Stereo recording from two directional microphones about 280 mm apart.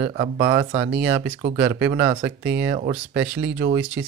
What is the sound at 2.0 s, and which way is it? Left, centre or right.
Speech, right.